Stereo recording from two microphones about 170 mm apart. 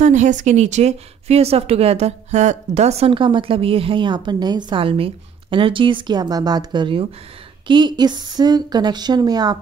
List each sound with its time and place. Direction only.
0.0 s a woman's voice: 45° right (ahead or behind); by 9.6 s 25° right (ahead or behind)